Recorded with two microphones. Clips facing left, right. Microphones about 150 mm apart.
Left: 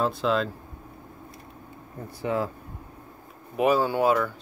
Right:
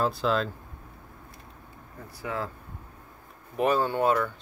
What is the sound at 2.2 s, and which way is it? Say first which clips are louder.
Speech: left 6 dB; 20° left (ahead or behind).